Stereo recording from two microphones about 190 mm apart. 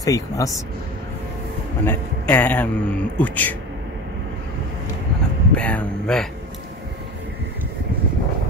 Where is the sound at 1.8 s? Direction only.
10° left (ahead or behind).